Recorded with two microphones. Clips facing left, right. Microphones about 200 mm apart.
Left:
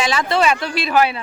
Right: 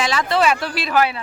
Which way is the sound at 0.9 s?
20° left (ahead or behind).